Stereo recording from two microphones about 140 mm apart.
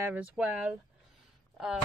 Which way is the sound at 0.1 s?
10° right (ahead or behind).